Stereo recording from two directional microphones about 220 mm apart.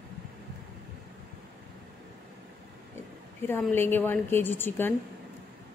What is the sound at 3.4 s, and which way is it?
A woman's voice, 10° left (ahead or behind).